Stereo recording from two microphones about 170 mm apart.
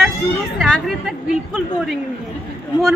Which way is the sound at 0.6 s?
Centre (ahead or behind).